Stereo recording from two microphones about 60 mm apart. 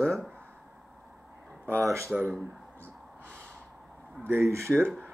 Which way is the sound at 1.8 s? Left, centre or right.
Right.